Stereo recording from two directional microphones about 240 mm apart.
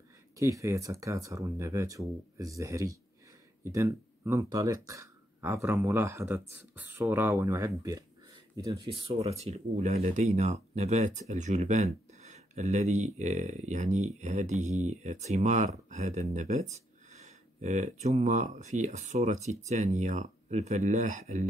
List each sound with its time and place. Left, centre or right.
0.4 s speech: centre; by 21.5 s right